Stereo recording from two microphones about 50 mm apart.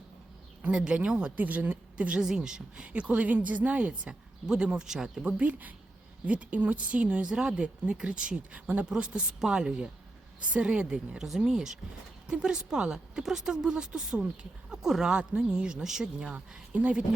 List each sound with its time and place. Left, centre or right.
0.7 s a woman's voice: centre
2.2 s speech: centre
2.8 s speech: right
4.1 s speech: centre
5.2 s speech: right
8.6 s a woman's voice: right; by 16.0 s centre
16.2 s speech: right